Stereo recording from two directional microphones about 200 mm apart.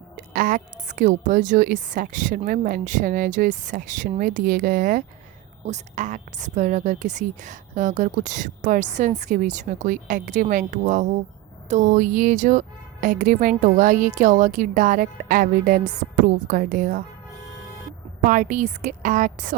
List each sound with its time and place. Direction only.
0.2 s a woman's voice: 45° right (ahead or behind)
18.3 s a woman's voice: 40° right (ahead or behind)